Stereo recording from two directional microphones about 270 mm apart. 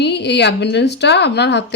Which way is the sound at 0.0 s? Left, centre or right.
Left.